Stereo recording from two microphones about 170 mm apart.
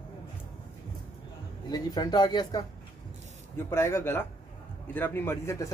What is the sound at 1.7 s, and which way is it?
Speech, 25° left (ahead or behind).